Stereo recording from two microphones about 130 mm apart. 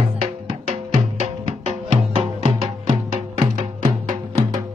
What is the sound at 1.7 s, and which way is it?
Music, 45° right (ahead or behind).